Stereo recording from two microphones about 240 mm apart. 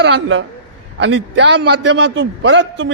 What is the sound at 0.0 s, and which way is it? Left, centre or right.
A man's voice, right.